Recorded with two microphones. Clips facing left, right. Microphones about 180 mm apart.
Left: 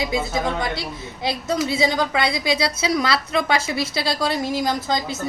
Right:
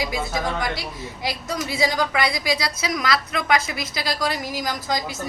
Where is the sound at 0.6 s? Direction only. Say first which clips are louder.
Left 1 dB; 25° left (ahead or behind).